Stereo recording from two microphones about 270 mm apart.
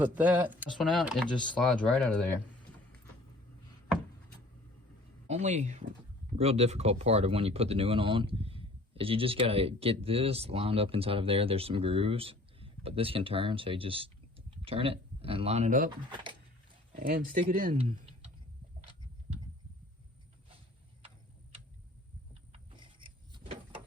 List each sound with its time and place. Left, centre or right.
0.0 s speech: centre
5.3 s speech: right
16.9 s speech: right
18.8 s a sound: right
22.5 s vehicle: centre